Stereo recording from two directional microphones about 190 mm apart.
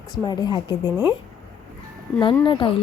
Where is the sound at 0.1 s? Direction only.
20° left (ahead or behind).